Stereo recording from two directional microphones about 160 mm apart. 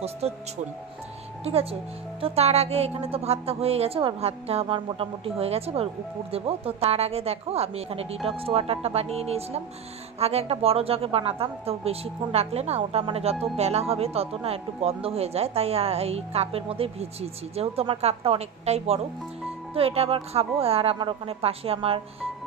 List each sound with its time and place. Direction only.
0.2 s a woman's voice: 40° right (ahead or behind)
1.4 s a woman's voice: 40° right (ahead or behind)